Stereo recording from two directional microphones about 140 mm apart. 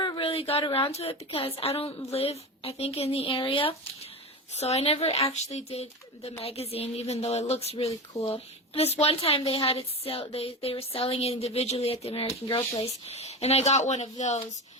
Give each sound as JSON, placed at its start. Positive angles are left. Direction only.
{"t": 0.0, "sound": "a woman's voice", "side_deg": 35}
{"t": 4.5, "sound": "a woman's voice", "side_deg": 50}